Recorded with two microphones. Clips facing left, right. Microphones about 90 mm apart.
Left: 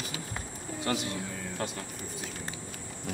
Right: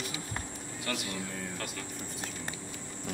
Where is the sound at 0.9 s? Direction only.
30° left (ahead or behind).